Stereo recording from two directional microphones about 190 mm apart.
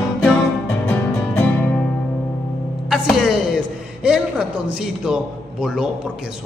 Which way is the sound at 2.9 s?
Centre (ahead or behind).